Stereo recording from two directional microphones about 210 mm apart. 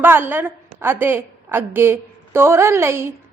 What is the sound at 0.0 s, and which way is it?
A woman's voice, 10° right (ahead or behind).